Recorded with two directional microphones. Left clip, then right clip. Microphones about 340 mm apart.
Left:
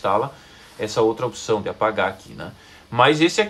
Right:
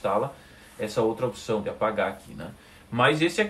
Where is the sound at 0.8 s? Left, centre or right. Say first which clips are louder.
Left 6 dB; centre.